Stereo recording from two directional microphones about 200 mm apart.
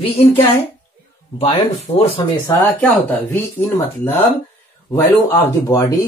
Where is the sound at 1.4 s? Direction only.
30° left (ahead or behind).